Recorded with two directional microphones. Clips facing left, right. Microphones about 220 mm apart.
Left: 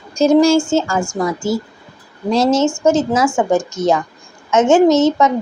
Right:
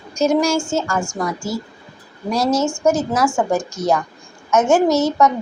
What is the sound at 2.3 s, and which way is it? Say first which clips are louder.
Speech: left 4 dB; 25° left (ahead or behind).